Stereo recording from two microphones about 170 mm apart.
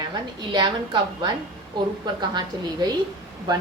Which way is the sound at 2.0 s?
25° right (ahead or behind).